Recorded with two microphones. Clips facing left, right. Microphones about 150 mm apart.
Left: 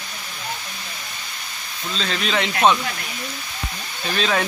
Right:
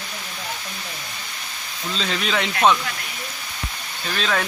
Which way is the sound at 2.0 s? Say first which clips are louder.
Left 1 dB; 5° right (ahead or behind).